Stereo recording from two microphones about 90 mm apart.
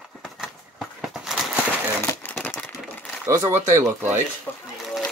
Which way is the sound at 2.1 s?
25° left (ahead or behind).